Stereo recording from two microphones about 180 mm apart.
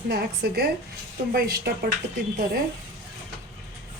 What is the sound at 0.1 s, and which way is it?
Speech, 65° right (ahead or behind).